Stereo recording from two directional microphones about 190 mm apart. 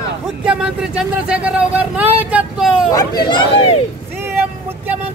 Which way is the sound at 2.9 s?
20° left (ahead or behind).